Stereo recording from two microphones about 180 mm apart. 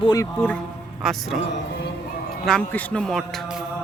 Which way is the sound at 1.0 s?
Centre (ahead or behind).